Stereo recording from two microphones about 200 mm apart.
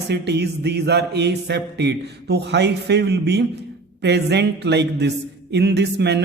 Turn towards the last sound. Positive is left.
turn(degrees=-60)  # may be behind; listen again after turning